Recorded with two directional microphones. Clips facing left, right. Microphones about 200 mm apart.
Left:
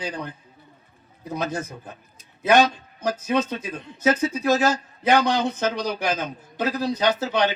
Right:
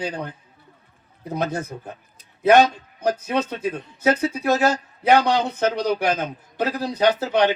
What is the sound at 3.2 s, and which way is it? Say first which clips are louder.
A man's voice: even; 60° right (ahead or behind).